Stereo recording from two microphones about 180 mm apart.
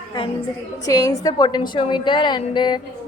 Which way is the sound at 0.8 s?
20° left (ahead or behind).